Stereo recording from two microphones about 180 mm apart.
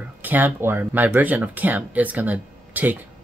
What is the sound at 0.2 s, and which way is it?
Speech, 10° right (ahead or behind).